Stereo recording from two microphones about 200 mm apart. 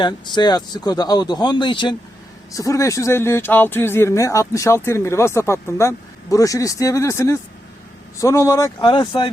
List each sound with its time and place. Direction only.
0.0 s speech: 20° left (ahead or behind)